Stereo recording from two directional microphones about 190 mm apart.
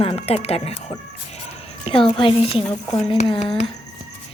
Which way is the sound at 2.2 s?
30° left (ahead or behind).